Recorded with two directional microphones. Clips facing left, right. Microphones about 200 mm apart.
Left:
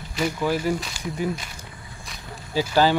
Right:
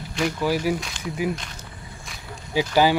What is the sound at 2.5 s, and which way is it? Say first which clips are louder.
Speech: right 1 dB; 15° right (ahead or behind).